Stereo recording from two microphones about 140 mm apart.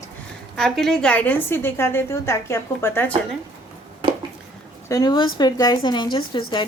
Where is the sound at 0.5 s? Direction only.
Centre (ahead or behind).